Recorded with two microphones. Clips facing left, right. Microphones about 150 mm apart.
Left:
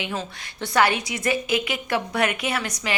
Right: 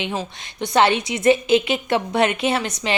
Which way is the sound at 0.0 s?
20° right (ahead or behind).